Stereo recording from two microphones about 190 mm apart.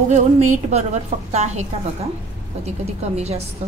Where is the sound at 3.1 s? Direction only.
35° right (ahead or behind).